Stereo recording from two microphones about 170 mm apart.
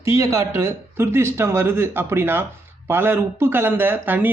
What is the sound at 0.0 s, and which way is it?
Speech, 15° right (ahead or behind).